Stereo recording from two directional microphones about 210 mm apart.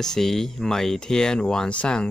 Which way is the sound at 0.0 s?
Centre (ahead or behind).